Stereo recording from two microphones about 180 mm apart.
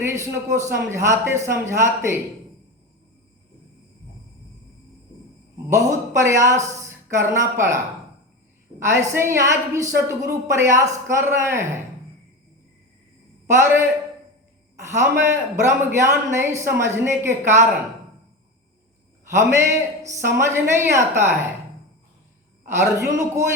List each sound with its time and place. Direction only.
0.0 s a man's voice: 15° right (ahead or behind)
5.6 s a man's voice: 15° right (ahead or behind)
8.8 s a man's voice: 15° right (ahead or behind)
14.8 s a man's voice: 15° right (ahead or behind)
19.3 s a man's voice: 15° right (ahead or behind)
22.8 s a man's voice: 15° right (ahead or behind)